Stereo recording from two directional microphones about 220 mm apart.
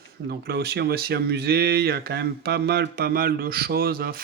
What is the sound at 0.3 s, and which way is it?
Speech, 45° right (ahead or behind).